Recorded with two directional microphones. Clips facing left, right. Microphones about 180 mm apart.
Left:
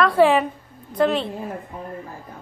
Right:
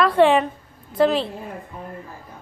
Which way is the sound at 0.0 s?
Centre (ahead or behind).